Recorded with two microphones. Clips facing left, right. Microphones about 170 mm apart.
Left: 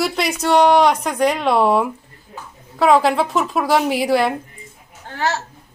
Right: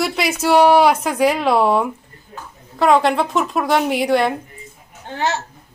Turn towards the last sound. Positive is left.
turn(degrees=-20)  # may be behind; listen again after turning